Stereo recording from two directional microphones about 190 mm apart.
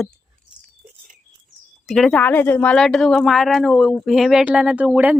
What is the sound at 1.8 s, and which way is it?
Speech, centre (ahead or behind).